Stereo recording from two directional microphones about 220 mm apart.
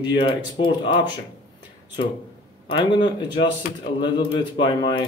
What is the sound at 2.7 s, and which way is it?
Speech, 20° left (ahead or behind).